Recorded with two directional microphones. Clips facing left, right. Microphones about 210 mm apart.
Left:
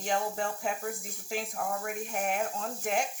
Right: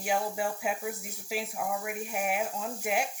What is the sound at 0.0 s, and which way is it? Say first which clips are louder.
Speech: right 1 dB; 10° right (ahead or behind).